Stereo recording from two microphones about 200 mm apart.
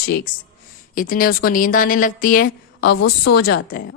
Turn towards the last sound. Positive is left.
turn(degrees=55)  # may be behind; listen again after turning